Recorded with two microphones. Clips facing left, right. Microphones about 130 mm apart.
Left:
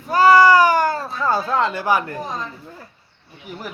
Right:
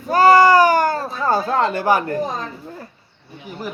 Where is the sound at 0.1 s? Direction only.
45° right (ahead or behind).